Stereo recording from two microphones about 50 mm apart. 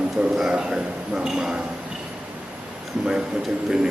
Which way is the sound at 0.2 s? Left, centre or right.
Centre.